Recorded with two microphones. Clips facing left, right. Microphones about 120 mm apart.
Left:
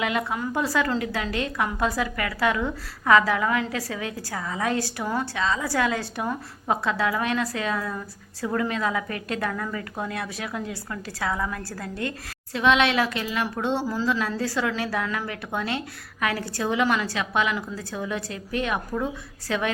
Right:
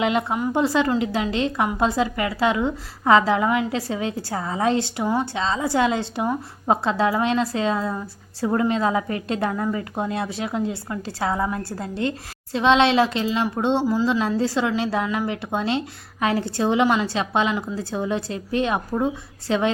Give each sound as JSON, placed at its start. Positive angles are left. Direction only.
{"t": 0.0, "sound": "a woman's voice", "side_deg": -25}